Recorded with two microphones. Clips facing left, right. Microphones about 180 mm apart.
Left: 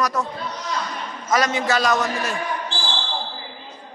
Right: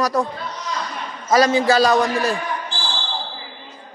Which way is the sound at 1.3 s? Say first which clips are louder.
Right 5 dB; 30° right (ahead or behind).